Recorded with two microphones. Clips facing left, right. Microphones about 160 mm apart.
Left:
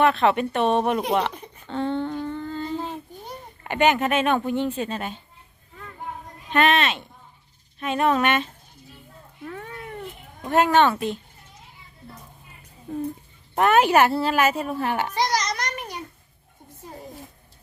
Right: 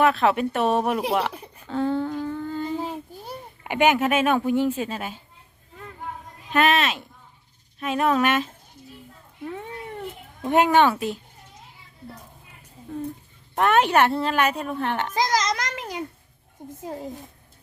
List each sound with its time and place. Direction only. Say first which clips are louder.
0.0 s a woman's voice: even; centre (ahead or behind)
6.5 s speech: even; centre (ahead or behind)
9.5 s a sound: right 2 dB; 20° right (ahead or behind)
10.4 s speech: even; 15° right (ahead or behind)
13.6 s speech: left 1 dB; 5° left (ahead or behind)
15.1 s a sound: right 1 dB; 90° right